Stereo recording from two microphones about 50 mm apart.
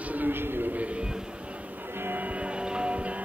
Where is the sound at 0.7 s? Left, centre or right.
Right.